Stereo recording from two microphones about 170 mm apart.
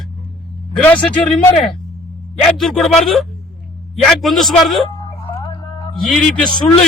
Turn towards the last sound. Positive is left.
turn(degrees=5)  # may be behind; listen again after turning